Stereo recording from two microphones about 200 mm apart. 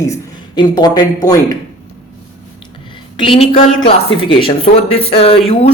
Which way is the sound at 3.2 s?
25° left (ahead or behind).